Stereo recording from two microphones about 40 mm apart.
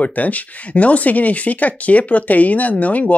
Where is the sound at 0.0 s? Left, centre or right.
Left.